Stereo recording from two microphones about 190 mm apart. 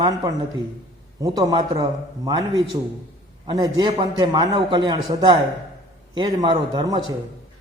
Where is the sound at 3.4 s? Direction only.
25° right (ahead or behind).